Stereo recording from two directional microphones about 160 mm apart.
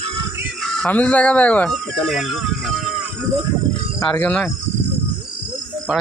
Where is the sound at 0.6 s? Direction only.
5° left (ahead or behind).